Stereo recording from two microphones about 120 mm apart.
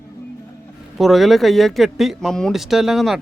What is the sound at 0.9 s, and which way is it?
Speech, centre (ahead or behind).